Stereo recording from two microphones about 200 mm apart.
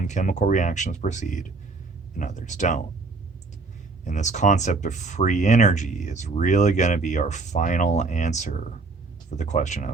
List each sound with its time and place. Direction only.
0.0 s speech: 40° left (ahead or behind)
4.0 s speech: 35° left (ahead or behind)